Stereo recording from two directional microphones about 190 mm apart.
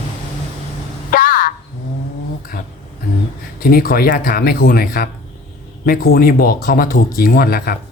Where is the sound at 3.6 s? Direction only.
50° left (ahead or behind).